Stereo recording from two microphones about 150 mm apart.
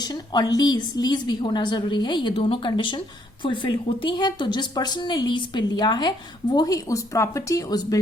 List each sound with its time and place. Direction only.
0.0 s a woman's voice: 25° left (ahead or behind)